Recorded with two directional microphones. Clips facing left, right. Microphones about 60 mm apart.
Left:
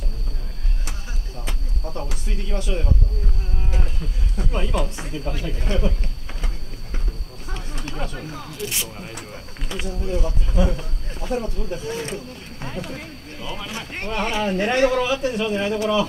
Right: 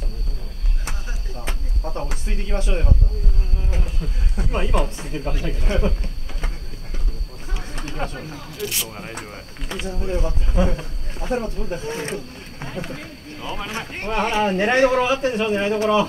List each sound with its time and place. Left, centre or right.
1.4 s speech: right
4.5 s speech: right
8.0 s speech: right